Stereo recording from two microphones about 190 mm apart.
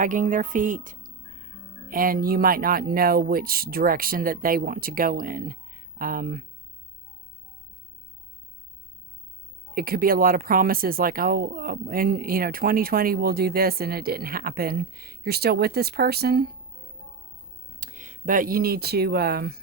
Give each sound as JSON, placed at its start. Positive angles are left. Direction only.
{"t": 0.0, "sound": "speech", "side_deg": -45}
{"t": 9.7, "sound": "speech", "side_deg": -50}
{"t": 17.7, "sound": "speech", "side_deg": -45}